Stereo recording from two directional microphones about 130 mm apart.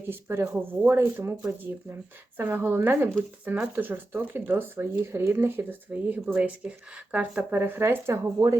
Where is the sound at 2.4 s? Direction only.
15° right (ahead or behind).